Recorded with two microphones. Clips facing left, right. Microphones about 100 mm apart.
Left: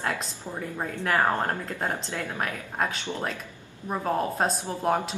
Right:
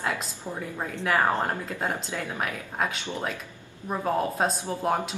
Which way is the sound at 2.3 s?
Centre (ahead or behind).